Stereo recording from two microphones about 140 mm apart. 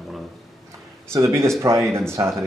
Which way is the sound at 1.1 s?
20° right (ahead or behind).